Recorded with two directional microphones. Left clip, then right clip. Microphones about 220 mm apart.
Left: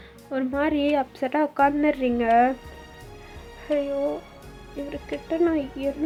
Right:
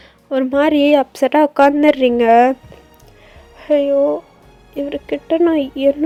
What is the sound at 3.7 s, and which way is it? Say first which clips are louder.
Speech: right 11 dB; 35° right (ahead or behind).